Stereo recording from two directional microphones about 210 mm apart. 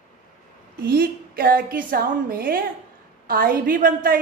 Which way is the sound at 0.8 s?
45° right (ahead or behind).